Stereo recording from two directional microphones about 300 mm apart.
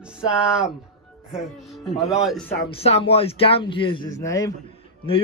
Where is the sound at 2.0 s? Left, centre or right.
Centre.